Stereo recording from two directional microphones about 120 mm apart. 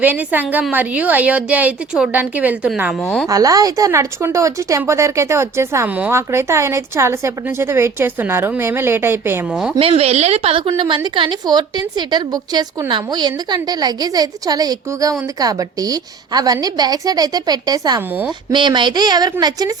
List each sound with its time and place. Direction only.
0.0 s a woman's voice: 15° right (ahead or behind)
3.0 s speech: 5° left (ahead or behind)
3.2 s speech: 30° right (ahead or behind)
9.5 s a woman's voice: 5° right (ahead or behind)
9.7 s a woman's voice: 50° right (ahead or behind); by 19.7 s 35° right (ahead or behind)